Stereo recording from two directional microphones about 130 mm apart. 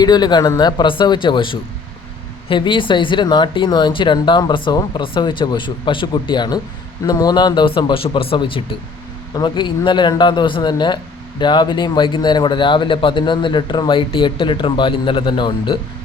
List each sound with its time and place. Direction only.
0.0 s speech: 35° left (ahead or behind)